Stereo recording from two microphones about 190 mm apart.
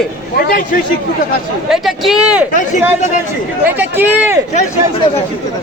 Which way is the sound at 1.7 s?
Centre (ahead or behind).